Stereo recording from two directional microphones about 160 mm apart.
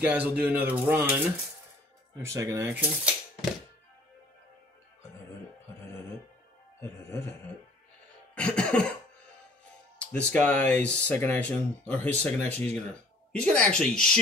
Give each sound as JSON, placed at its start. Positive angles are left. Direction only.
{"t": 0.0, "sound": "speech", "side_deg": -10}
{"t": 2.2, "sound": "speech", "side_deg": -20}
{"t": 6.8, "sound": "music", "side_deg": 15}
{"t": 8.4, "sound": "speech", "side_deg": 5}
{"t": 9.9, "sound": "speech", "side_deg": 10}